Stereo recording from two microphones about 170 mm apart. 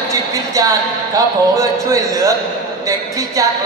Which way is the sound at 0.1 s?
20° right (ahead or behind).